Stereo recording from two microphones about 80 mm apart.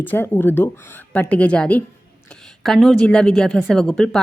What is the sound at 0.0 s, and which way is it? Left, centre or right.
Speech, left.